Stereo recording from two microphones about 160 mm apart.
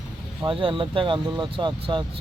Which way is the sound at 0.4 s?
30° right (ahead or behind).